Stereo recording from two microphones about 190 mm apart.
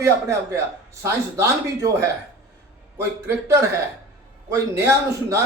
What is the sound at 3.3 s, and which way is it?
A man's voice, 15° right (ahead or behind).